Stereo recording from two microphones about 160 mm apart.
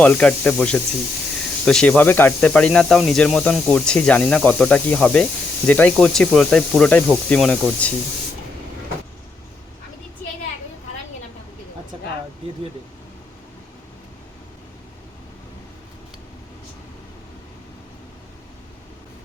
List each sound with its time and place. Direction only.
0.0 s speech: 10° left (ahead or behind)